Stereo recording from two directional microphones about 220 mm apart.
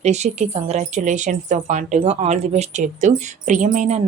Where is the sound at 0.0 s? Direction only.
30° right (ahead or behind).